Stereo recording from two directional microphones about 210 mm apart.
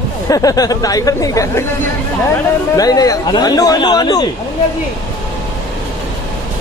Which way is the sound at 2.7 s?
15° left (ahead or behind).